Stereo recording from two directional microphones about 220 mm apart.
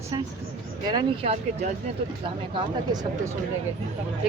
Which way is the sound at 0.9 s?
20° right (ahead or behind).